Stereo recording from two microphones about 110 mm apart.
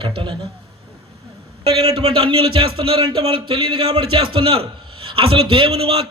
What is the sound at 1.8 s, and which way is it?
A man's voice, 60° right (ahead or behind).